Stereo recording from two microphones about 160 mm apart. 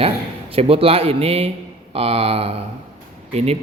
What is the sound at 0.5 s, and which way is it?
A man's voice, 35° right (ahead or behind).